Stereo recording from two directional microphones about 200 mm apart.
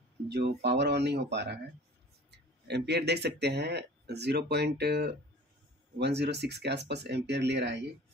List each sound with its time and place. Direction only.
0.3 s speech: 55° right (ahead or behind)